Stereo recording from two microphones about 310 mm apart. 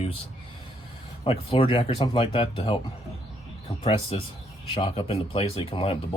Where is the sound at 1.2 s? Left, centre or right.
Centre.